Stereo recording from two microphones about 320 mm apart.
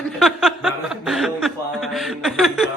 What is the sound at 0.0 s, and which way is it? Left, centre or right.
Chuckle, centre.